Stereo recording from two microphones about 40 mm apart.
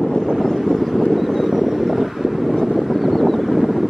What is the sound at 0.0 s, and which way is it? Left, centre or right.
Vehicle, centre.